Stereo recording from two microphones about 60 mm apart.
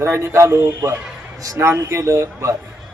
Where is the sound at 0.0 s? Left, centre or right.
Right.